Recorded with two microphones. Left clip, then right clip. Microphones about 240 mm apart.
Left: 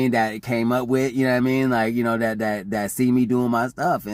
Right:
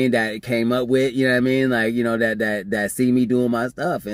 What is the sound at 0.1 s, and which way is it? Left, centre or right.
Speech, left.